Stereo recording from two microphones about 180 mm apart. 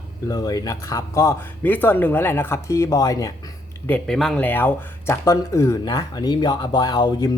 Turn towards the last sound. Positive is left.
turn(degrees=25)  # may be behind; listen again after turning